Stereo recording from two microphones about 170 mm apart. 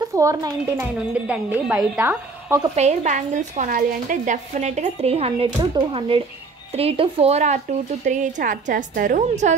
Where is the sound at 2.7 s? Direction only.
40° right (ahead or behind).